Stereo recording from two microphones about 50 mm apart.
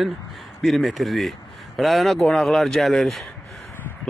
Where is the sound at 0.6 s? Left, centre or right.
Centre.